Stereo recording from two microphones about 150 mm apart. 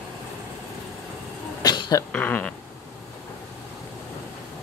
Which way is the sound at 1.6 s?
25° left (ahead or behind).